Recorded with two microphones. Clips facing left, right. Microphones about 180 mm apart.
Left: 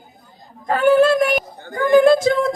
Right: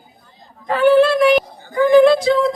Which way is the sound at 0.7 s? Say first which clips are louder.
Right 1 dB; 45° left (ahead or behind).